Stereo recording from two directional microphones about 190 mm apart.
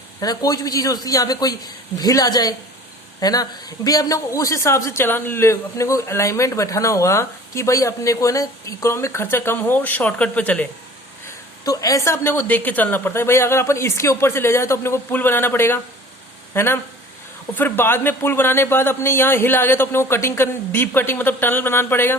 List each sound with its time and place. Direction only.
0.2 s a man's voice: 20° left (ahead or behind)
11.6 s a man's voice: 20° left (ahead or behind)